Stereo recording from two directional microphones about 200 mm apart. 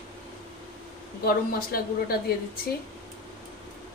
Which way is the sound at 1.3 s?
45° left (ahead or behind).